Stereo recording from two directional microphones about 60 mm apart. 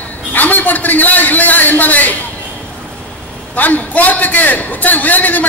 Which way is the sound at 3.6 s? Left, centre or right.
Left.